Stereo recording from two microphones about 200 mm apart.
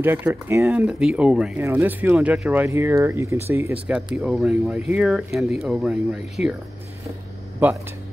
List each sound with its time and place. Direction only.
0.0 s speech: 10° right (ahead or behind)
7.6 s speech: 10° right (ahead or behind)